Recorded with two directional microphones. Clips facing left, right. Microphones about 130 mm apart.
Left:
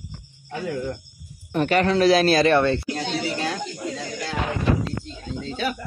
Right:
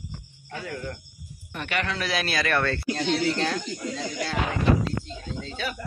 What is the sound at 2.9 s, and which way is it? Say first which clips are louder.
Speech: right 2 dB; 5° left (ahead or behind).